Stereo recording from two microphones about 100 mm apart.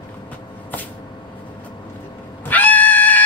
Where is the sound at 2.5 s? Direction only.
15° left (ahead or behind).